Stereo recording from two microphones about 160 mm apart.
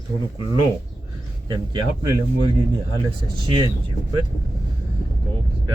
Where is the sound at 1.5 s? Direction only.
25° right (ahead or behind).